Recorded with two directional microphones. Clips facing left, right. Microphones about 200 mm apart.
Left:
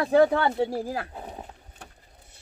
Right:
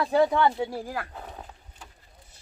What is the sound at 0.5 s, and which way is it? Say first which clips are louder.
Speech: left 4 dB; 35° left (ahead or behind).